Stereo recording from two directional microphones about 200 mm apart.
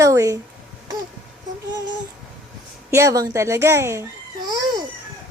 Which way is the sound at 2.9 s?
15° right (ahead or behind).